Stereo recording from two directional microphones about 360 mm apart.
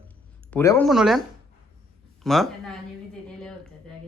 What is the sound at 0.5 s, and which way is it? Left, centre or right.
Speech, centre.